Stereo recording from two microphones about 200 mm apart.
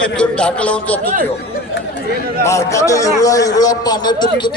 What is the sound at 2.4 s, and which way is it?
A man's voice, 15° left (ahead or behind).